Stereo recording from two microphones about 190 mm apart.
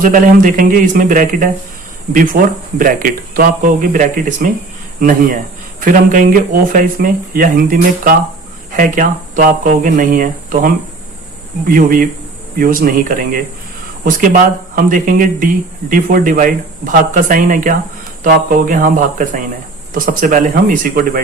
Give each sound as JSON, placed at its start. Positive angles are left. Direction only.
{"t": 0.0, "sound": "speech", "side_deg": -45}